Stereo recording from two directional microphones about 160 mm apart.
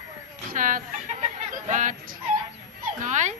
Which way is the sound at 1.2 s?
50° right (ahead or behind).